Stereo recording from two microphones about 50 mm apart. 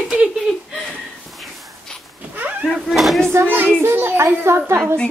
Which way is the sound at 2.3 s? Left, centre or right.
Right.